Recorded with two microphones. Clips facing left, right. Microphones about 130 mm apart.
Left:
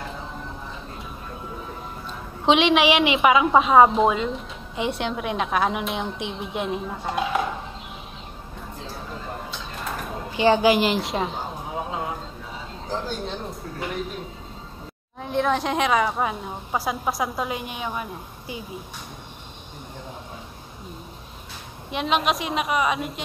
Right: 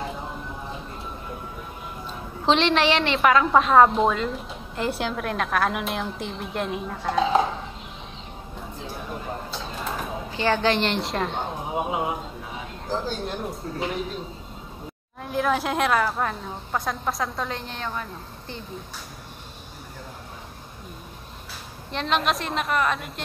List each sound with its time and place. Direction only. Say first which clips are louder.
2.4 s a woman's voice: left 2 dB; 5° left (ahead or behind)
10.3 s a woman's voice: left 5 dB; 15° left (ahead or behind)
11.6 s a sound: right 4 dB; 15° right (ahead or behind)
13.1 s a woman's voice: right 1 dB; 5° right (ahead or behind)
15.2 s a woman's voice: left 1 dB; centre (ahead or behind)
21.9 s a woman's voice: left 1 dB; centre (ahead or behind)